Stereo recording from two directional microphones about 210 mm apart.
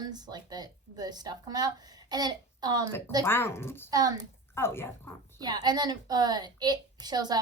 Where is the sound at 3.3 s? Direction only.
10° left (ahead or behind).